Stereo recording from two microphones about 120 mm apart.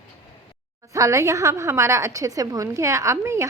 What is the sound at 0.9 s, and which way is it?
A woman's voice, 25° right (ahead or behind).